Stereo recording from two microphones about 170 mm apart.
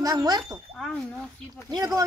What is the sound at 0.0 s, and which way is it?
Speech, 20° right (ahead or behind).